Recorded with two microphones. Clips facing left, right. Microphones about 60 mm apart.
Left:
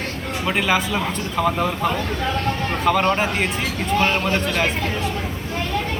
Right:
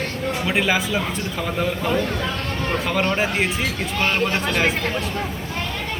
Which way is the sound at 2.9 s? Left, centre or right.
Centre.